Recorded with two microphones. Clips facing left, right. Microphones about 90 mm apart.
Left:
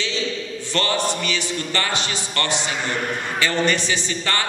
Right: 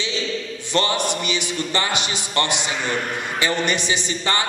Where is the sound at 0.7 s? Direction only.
20° right (ahead or behind).